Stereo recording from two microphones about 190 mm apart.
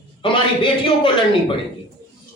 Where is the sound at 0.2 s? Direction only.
25° left (ahead or behind).